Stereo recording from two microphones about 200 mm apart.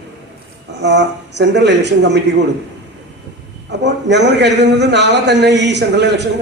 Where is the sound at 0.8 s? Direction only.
60° right (ahead or behind).